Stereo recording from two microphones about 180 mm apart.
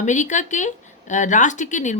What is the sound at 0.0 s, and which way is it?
Speech, 45° left (ahead or behind).